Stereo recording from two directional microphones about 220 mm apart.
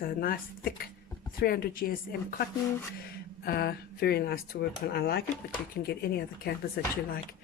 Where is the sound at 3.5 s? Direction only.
45° left (ahead or behind).